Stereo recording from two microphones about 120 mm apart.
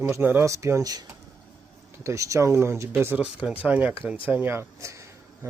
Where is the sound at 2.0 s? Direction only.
25° right (ahead or behind).